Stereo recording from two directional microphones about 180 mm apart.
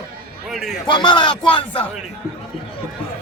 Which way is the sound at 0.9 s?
25° left (ahead or behind).